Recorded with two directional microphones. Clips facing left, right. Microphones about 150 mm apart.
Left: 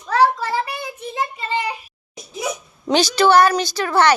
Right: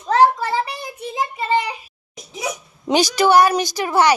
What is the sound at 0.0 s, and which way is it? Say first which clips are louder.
Child singing: right 2 dB; 20° right (ahead or behind).